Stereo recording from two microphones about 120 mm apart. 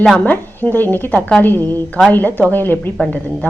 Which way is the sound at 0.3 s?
15° left (ahead or behind).